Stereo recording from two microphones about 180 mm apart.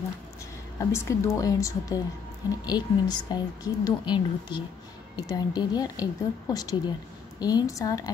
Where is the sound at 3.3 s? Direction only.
20° left (ahead or behind).